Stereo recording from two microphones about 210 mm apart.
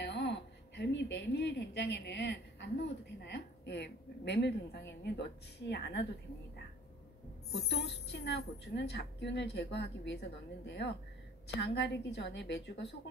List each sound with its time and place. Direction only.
0.0 s a woman's voice: 55° left (ahead or behind)
7.5 s a woman's voice: 55° left (ahead or behind)